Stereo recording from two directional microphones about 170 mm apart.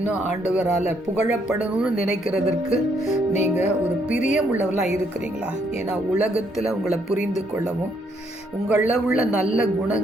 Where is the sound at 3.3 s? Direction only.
45° left (ahead or behind).